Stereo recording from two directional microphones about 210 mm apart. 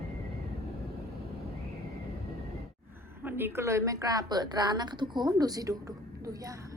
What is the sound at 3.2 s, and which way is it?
A woman's voice, 10° right (ahead or behind).